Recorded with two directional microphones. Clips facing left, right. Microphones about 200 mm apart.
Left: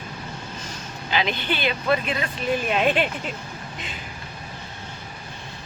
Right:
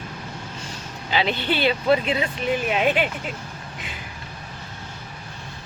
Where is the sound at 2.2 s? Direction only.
10° right (ahead or behind).